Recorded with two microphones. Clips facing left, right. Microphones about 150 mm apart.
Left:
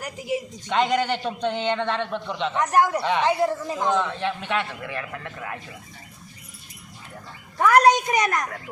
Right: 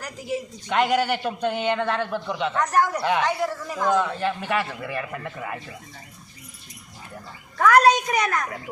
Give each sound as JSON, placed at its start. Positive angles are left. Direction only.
{"t": 0.0, "sound": "a woman's voice", "side_deg": 15}
{"t": 0.7, "sound": "a man's voice", "side_deg": -5}
{"t": 2.6, "sound": "speech", "side_deg": 20}
{"t": 3.0, "sound": "a man's voice", "side_deg": -5}
{"t": 3.2, "sound": "speech", "side_deg": 25}
{"t": 3.9, "sound": "a man's voice", "side_deg": -5}
{"t": 7.6, "sound": "a woman's voice", "side_deg": 15}